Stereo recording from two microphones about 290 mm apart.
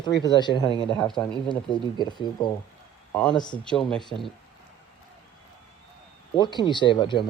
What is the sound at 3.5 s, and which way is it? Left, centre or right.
Speech, centre.